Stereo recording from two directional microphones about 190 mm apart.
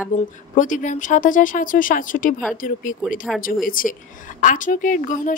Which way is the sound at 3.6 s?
45° left (ahead or behind).